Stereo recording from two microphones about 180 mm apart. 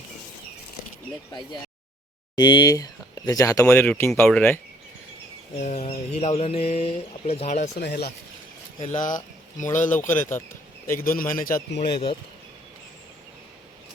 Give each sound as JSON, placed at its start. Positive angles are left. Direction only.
{"t": 2.3, "sound": "speech", "side_deg": 25}
{"t": 5.5, "sound": "speech", "side_deg": 45}
{"t": 7.8, "sound": "speech", "side_deg": 60}
{"t": 8.8, "sound": "speech", "side_deg": 45}
{"t": 10.1, "sound": "speech", "side_deg": 10}
{"t": 11.0, "sound": "a man's voice", "side_deg": 55}